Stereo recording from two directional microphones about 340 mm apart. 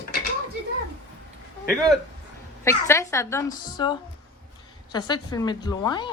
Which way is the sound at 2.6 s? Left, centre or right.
Centre.